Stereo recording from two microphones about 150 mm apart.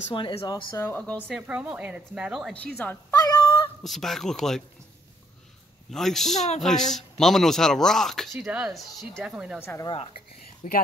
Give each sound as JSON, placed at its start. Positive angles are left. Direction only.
{"t": 0.1, "sound": "speech", "side_deg": 35}
{"t": 0.7, "sound": "speech", "side_deg": 10}
{"t": 1.2, "sound": "a woman's voice", "side_deg": -10}
{"t": 2.8, "sound": "speech", "side_deg": 10}
{"t": 3.3, "sound": "a sound", "side_deg": 35}
{"t": 3.8, "sound": "speech", "side_deg": 0}
{"t": 5.9, "sound": "speech", "side_deg": 0}
{"t": 6.3, "sound": "speech", "side_deg": 50}
{"t": 6.6, "sound": "a woman's voice", "side_deg": 0}
{"t": 9.6, "sound": "speech", "side_deg": 15}
{"t": 9.8, "sound": "speech", "side_deg": 40}
{"t": 10.6, "sound": "speech", "side_deg": 65}